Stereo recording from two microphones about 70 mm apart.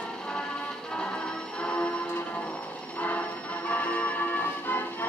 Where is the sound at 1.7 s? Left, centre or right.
Centre.